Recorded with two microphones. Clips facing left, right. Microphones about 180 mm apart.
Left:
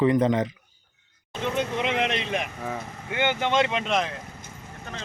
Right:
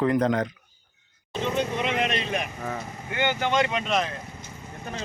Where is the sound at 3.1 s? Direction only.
20° left (ahead or behind).